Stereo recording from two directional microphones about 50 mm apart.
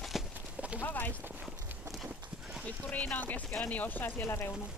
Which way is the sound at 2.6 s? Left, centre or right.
Left.